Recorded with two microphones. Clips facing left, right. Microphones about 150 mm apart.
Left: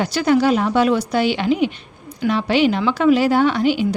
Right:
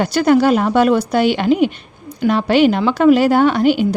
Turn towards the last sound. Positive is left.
turn(degrees=-50)  # may be behind; listen again after turning